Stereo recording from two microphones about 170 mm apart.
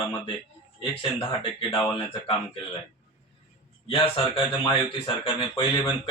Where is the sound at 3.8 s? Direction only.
35° left (ahead or behind).